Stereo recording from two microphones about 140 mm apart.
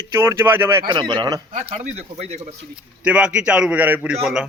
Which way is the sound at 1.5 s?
50° right (ahead or behind).